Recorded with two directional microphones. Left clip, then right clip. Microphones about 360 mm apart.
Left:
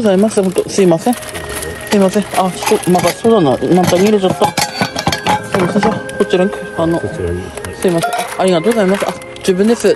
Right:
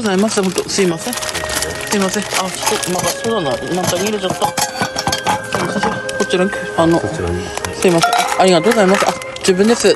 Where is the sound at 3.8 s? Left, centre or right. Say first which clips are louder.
Left 6 dB; centre.